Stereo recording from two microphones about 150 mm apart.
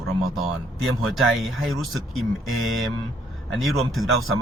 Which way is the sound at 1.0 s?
Centre (ahead or behind).